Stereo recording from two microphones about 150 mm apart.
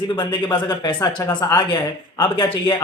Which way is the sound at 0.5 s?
30° left (ahead or behind).